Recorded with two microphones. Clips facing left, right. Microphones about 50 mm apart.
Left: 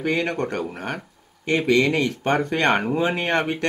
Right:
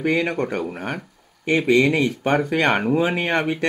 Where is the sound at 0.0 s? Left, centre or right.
Centre.